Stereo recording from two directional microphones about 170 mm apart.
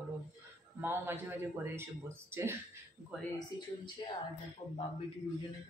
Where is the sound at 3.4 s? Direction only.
25° left (ahead or behind).